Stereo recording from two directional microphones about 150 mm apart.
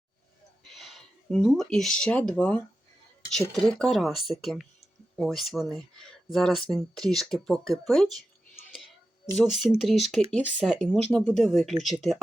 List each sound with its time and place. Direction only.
0.6 s speech: centre (ahead or behind)
9.4 s speech: centre (ahead or behind)